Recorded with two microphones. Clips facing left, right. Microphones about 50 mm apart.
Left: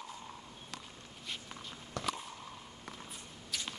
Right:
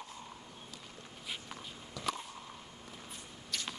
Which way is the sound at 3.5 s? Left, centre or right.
Centre.